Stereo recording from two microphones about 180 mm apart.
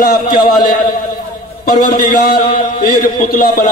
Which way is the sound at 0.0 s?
50° left (ahead or behind).